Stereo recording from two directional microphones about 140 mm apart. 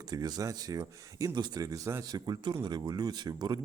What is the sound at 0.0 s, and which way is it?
Speech, 30° right (ahead or behind).